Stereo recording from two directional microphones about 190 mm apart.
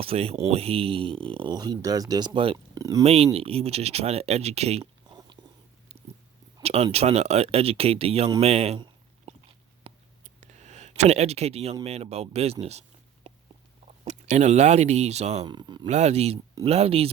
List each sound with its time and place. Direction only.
0.0 s speech: 30° right (ahead or behind)
3.0 s speech: 30° right (ahead or behind)
6.6 s speech: 30° right (ahead or behind)
8.4 s a sound: 35° right (ahead or behind)
9.9 s whispering: 30° right (ahead or behind)
10.4 s speech: 40° right (ahead or behind)
13.8 s speech: 35° right (ahead or behind)
15.4 s speech: 25° right (ahead or behind)
15.9 s speech: 35° right (ahead or behind)